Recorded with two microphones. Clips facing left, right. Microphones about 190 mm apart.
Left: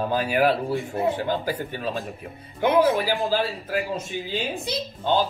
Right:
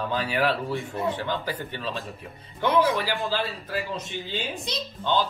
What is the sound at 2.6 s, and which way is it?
A woman's voice, 45° left (ahead or behind).